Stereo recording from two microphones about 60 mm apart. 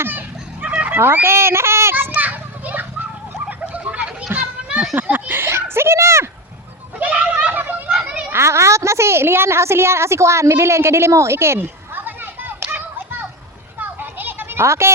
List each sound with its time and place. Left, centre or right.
0.0 s a sound: right
0.9 s a child's voice: right
2.1 s children playing: right
3.6 s bird: right
4.3 s children playing: right
4.9 s a sound: right
7.0 s children playing: right
7.9 s children playing: centre
8.3 s a woman's voice: right
12.0 s children playing: right
13.7 s a sound: right
14.6 s a woman's voice: right